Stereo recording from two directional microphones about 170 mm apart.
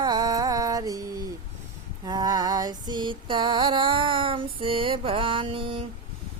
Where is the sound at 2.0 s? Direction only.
25° right (ahead or behind).